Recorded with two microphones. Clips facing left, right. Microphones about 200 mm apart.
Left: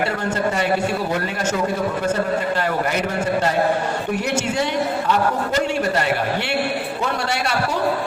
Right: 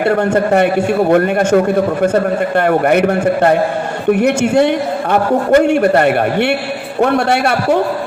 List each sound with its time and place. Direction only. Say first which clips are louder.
0.3 s a man's voice: right 8 dB; 55° right (ahead or behind)